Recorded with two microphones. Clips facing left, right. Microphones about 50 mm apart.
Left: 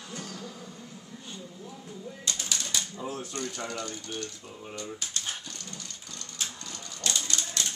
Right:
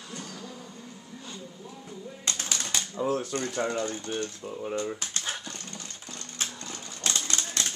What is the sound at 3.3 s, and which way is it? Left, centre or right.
Speech, right.